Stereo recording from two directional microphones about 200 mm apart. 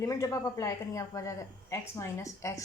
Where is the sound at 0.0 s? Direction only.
15° left (ahead or behind).